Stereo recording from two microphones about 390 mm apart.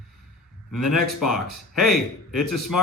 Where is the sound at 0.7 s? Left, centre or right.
Centre.